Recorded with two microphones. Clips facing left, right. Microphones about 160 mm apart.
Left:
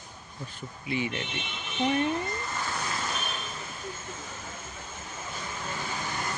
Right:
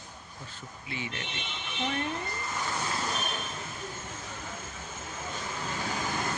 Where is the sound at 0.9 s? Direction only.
20° left (ahead or behind).